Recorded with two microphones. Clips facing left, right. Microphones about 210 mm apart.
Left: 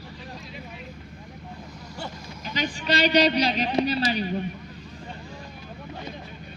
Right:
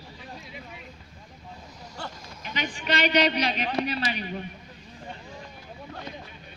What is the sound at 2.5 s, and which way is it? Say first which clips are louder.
A man's voice: left 3 dB; 35° left (ahead or behind).